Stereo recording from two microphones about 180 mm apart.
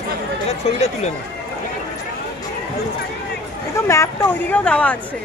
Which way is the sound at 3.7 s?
15° left (ahead or behind).